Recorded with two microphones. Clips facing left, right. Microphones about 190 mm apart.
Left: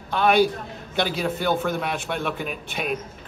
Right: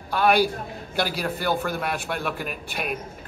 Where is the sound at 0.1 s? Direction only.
Centre (ahead or behind).